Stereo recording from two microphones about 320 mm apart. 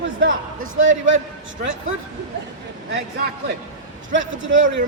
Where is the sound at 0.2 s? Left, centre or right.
Right.